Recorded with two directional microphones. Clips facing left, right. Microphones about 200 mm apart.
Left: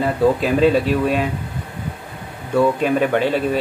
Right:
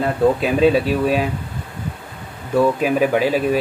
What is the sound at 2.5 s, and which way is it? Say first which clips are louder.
Speech: even; 5° right (ahead or behind).